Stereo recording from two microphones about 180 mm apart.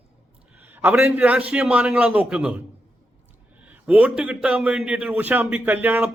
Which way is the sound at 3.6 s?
5° right (ahead or behind).